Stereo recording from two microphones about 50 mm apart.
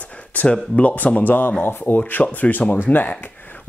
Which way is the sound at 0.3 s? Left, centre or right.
Left.